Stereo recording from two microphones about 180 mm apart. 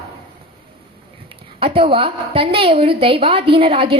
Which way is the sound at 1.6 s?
30° right (ahead or behind).